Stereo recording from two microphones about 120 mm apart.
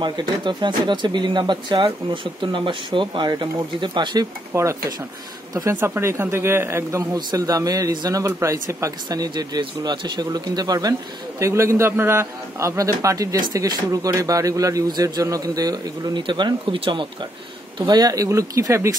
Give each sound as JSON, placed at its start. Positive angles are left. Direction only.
{"t": 0.0, "sound": "speech", "side_deg": -40}
{"t": 4.6, "sound": "a man's voice", "side_deg": -25}
{"t": 17.7, "sound": "a man's voice", "side_deg": -35}